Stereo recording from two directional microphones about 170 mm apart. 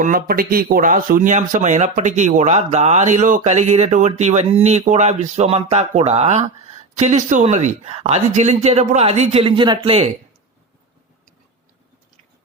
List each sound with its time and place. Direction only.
0.0 s speech: 60° right (ahead or behind); by 10.1 s 30° right (ahead or behind)